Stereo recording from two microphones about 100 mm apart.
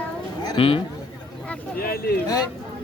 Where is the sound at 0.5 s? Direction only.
65° left (ahead or behind).